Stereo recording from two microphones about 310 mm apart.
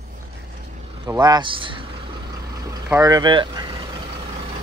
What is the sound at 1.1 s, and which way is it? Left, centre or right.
Speech, centre.